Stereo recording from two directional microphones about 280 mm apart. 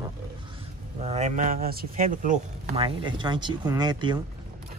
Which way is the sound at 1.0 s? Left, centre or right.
Right.